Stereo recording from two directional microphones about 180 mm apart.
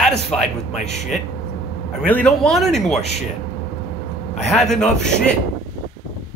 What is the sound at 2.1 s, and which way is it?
Speech, 5° left (ahead or behind).